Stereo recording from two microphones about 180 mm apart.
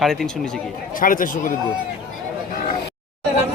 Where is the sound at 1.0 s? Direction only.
50° left (ahead or behind).